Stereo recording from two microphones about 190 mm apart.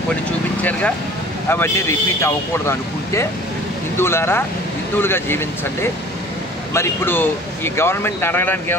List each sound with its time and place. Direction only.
0.6 s a man's voice: 10° left (ahead or behind)
6.7 s a man's voice: 10° left (ahead or behind)